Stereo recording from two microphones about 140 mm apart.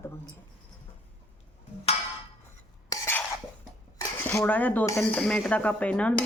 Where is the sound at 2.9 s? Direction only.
15° left (ahead or behind).